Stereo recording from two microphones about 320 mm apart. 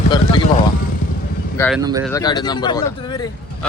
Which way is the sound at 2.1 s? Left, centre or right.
Centre.